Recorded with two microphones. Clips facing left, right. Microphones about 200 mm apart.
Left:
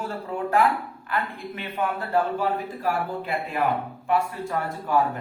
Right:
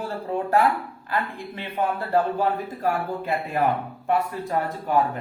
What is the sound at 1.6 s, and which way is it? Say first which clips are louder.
A man's voice: right 2 dB; 35° right (ahead or behind).